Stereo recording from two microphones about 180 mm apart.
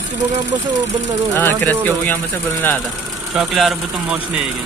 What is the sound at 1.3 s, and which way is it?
Speech, 10° left (ahead or behind).